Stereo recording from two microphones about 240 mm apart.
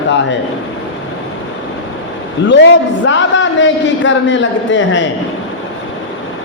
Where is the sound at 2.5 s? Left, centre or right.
Left.